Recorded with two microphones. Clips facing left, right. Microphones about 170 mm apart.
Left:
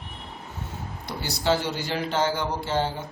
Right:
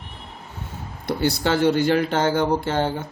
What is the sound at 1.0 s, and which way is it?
Speech, 60° right (ahead or behind).